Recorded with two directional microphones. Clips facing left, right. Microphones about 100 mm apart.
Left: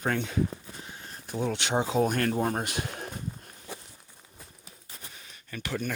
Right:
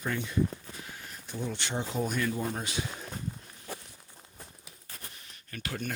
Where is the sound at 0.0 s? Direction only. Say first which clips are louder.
Left 4 dB; 75° left (ahead or behind).